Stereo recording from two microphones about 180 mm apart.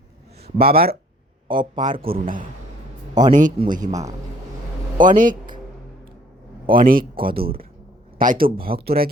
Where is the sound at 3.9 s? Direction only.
20° right (ahead or behind).